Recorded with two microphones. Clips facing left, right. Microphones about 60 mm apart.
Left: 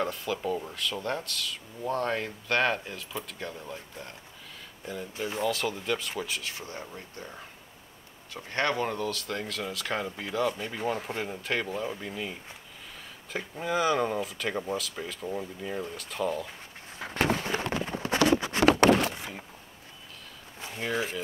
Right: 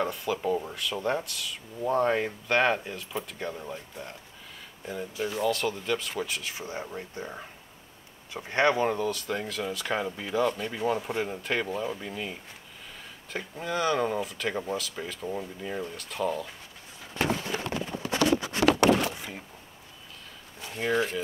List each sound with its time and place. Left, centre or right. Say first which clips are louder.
0.0 s speech: right 2 dB; centre
5.4 s speech: right 1 dB; centre
17.0 s a sound: left 1 dB; left
20.7 s speech: right 4 dB; centre